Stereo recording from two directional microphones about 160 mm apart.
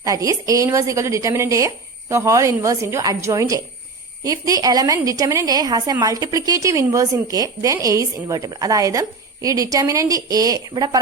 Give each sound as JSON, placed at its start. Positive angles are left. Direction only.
{"t": 0.0, "sound": "a woman's voice", "side_deg": -20}